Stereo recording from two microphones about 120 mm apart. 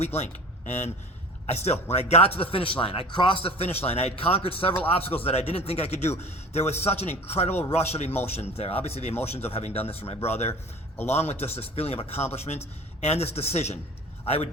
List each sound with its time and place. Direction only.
0.0 s speech: 65° left (ahead or behind)